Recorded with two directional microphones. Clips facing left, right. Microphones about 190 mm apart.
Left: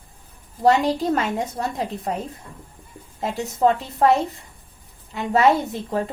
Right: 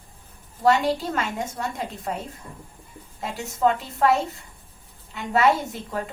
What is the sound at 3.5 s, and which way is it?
Speech, 35° left (ahead or behind).